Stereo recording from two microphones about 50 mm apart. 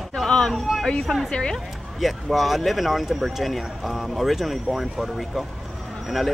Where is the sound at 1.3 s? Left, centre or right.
Centre.